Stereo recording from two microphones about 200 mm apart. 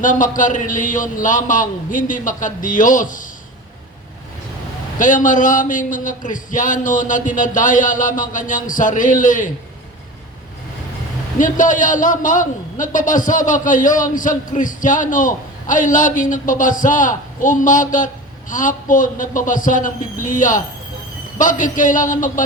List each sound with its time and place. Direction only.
0.0 s a man's voice: 40° left (ahead or behind)
4.9 s a man's voice: 40° left (ahead or behind)
11.3 s a man's voice: 40° left (ahead or behind)